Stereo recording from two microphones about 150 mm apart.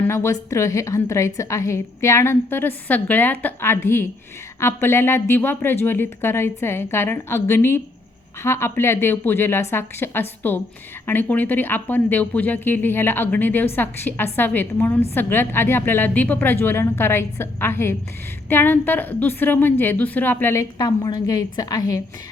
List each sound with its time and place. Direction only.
0.0 s a woman's voice: 15° left (ahead or behind)